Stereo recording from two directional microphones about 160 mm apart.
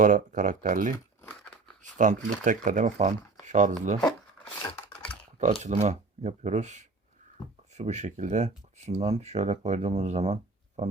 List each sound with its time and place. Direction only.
0.0 s speech: 55° right (ahead or behind)
1.2 s crumpling: 5° left (ahead or behind)
1.8 s speech: 50° right (ahead or behind)
5.6 s speech: 45° right (ahead or behind)